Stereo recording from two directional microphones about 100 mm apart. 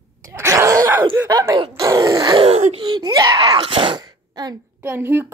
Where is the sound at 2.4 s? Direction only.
80° right.